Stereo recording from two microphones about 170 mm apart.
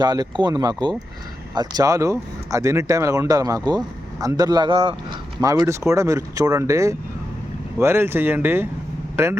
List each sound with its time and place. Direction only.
0.0 s speech: 25° right (ahead or behind)
5.4 s speech: 20° right (ahead or behind)